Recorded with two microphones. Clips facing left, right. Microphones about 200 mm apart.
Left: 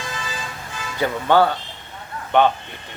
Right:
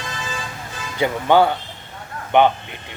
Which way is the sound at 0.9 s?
15° right (ahead or behind).